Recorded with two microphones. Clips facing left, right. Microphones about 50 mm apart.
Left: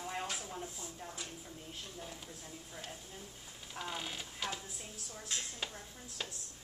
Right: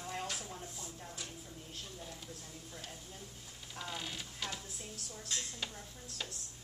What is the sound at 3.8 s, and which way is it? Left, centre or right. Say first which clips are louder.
Speech: left 1 dB; centre.